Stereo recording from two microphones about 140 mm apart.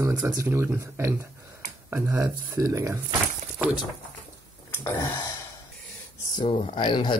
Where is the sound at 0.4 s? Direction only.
20° right (ahead or behind).